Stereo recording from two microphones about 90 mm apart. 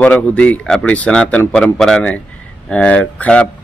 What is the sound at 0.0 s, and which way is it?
Speech, 15° left (ahead or behind).